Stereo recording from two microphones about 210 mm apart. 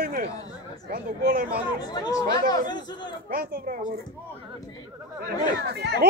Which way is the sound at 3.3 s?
45° right (ahead or behind).